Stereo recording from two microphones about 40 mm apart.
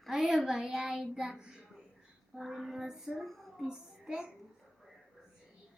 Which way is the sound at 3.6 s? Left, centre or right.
Centre.